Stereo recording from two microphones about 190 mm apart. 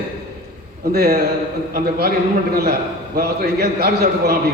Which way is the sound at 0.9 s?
55° right (ahead or behind).